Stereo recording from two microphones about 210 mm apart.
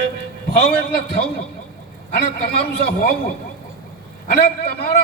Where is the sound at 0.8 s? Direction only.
45° left (ahead or behind).